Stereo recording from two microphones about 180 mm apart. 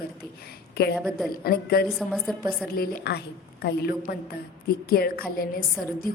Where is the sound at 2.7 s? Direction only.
55° left (ahead or behind).